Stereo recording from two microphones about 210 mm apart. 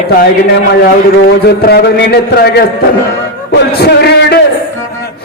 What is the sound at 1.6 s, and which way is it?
A man's voice, 50° left (ahead or behind).